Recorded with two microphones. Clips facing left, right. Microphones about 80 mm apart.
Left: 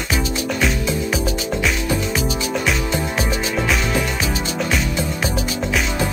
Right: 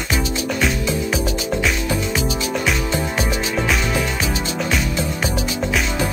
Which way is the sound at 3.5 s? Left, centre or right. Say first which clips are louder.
Even; centre.